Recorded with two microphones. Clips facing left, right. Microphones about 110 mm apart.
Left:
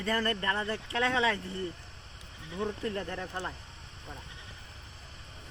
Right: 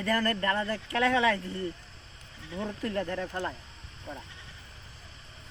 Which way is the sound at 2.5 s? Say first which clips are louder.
Right 1 dB; 25° left (ahead or behind).